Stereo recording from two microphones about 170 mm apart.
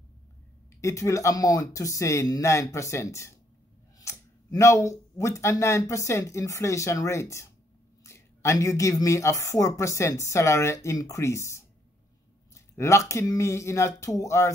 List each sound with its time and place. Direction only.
0.7 s speech: 20° left (ahead or behind)